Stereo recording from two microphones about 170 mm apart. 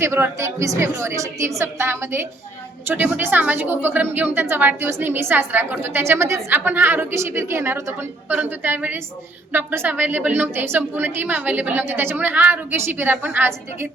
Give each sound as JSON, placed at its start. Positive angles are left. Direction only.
{"t": 0.0, "sound": "a woman's voice", "side_deg": -15}